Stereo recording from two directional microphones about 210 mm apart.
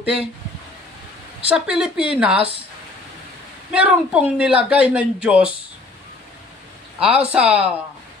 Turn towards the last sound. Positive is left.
turn(degrees=-5)  # may be behind; listen again after turning